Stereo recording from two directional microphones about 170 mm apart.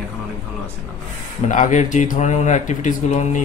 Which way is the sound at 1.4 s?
45° left (ahead or behind).